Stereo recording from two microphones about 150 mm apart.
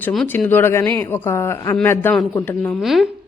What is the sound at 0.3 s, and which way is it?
A woman's voice, 15° left (ahead or behind).